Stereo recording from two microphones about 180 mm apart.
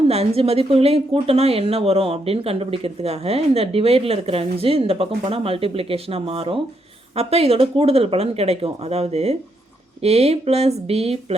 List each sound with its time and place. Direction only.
0.1 s speech: 35° right (ahead or behind)